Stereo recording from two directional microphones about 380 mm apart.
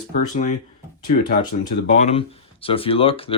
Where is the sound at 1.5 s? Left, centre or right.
Centre.